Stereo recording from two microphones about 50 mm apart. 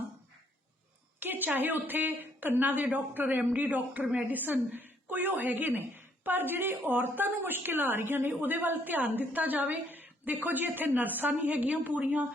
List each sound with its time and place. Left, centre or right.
1.2 s a woman's voice: right